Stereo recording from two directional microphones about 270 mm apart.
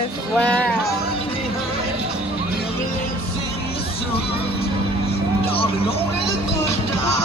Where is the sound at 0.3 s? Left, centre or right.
Centre.